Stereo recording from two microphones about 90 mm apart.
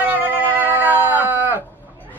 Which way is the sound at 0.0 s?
20° right (ahead or behind).